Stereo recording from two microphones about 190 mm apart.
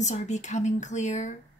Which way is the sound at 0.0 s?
40° left (ahead or behind).